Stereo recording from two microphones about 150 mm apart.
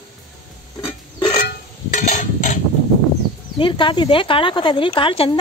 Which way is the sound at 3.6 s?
35° left (ahead or behind).